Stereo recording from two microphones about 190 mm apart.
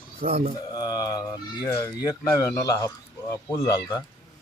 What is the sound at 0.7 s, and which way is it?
Speech, 20° left (ahead or behind).